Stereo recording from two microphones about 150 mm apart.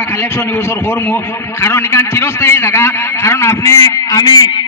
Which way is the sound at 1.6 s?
15° left (ahead or behind).